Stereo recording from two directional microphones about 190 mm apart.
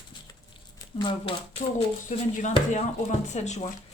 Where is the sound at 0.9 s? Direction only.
25° left (ahead or behind).